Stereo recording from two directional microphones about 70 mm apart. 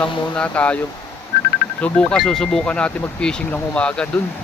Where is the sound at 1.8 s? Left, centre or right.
Centre.